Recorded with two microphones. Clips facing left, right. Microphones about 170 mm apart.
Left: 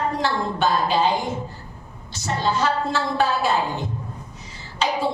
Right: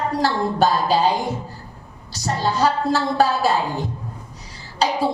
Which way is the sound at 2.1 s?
35° right (ahead or behind).